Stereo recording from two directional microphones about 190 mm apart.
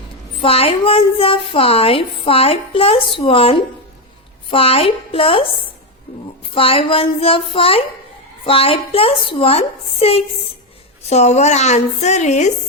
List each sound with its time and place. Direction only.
0.4 s a woman's voice: 30° left (ahead or behind)
6.5 s a woman's voice: 30° left (ahead or behind)